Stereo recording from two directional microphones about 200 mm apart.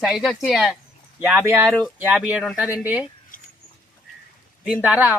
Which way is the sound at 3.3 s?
45° left (ahead or behind).